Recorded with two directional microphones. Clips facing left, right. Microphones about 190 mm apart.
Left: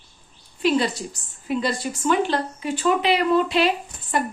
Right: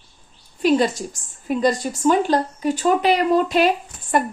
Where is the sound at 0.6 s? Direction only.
45° right (ahead or behind).